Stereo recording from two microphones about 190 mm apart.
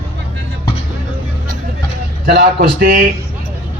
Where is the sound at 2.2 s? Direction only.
50° right (ahead or behind).